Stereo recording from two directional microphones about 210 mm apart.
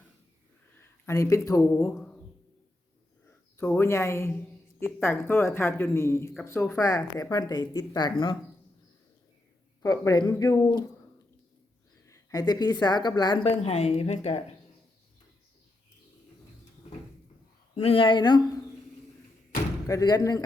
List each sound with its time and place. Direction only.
0.8 s speech: 15° left (ahead or behind)
2.0 s a sound: 5° left (ahead or behind)
3.2 s speech: 10° left (ahead or behind)
9.8 s speech: 15° left (ahead or behind)
12.0 s a woman's voice: 15° left (ahead or behind)
13.6 s speech: 30° left (ahead or behind)
17.7 s speech: 25° left (ahead or behind)
19.9 s speech: 20° left (ahead or behind)